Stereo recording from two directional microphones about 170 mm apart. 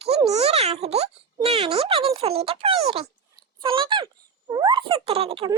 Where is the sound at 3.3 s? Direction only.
30° right (ahead or behind).